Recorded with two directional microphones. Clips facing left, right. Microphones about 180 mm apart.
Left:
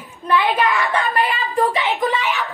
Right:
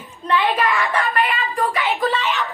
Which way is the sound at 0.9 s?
30° left (ahead or behind).